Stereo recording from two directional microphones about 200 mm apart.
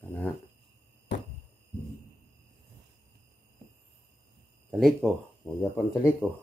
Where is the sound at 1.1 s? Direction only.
65° left (ahead or behind).